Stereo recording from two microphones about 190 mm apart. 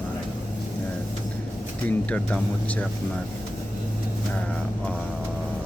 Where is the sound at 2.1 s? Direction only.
5° left (ahead or behind).